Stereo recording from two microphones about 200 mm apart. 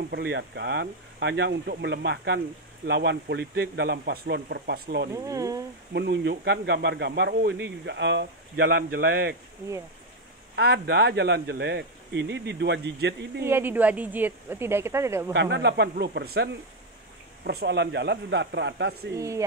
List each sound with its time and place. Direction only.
0.1 s speech: 55° right (ahead or behind)
5.1 s speech: 15° right (ahead or behind)
5.9 s speech: 55° right (ahead or behind)
10.5 s speech: 55° right (ahead or behind)
13.4 s speech: 10° right (ahead or behind)
15.3 s speech: 60° right (ahead or behind)
17.5 s speech: 55° right (ahead or behind)
19.1 s speech: 15° right (ahead or behind)